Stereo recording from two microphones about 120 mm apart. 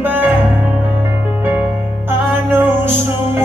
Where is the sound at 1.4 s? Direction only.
20° right (ahead or behind).